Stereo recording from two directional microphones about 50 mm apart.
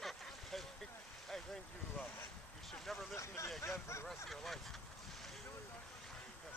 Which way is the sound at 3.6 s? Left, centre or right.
Left.